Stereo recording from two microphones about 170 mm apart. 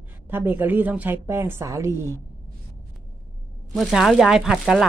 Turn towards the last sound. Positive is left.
turn(degrees=0)  # may be behind; listen again after turning